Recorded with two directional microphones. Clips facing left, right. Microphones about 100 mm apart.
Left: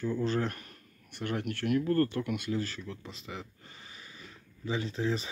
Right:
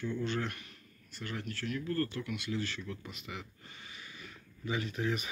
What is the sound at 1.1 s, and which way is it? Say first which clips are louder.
Speech: left 7 dB; 60° left (ahead or behind).